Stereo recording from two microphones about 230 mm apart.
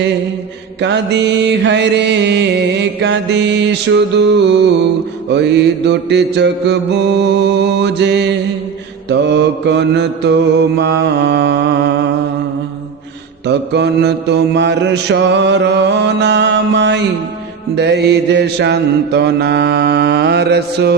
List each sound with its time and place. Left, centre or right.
0.8 s mantra: right
13.5 s mantra: right